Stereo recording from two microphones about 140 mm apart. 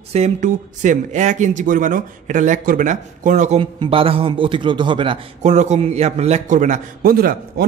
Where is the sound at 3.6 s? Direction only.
40° right (ahead or behind).